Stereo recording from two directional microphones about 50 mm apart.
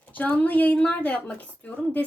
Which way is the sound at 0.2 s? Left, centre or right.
Left.